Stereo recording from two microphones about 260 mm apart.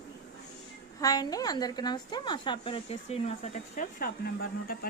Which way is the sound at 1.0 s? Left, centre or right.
Centre.